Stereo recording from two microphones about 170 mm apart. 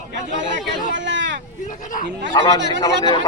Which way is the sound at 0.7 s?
90° right.